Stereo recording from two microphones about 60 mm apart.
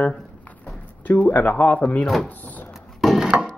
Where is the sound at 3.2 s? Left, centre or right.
Centre.